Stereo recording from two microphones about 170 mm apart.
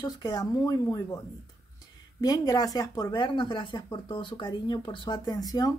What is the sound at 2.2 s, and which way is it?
Speech, 20° left (ahead or behind).